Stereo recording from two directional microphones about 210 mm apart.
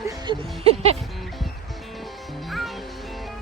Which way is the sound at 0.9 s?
Centre (ahead or behind).